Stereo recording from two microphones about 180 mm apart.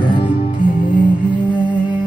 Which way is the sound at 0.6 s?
45° left (ahead or behind).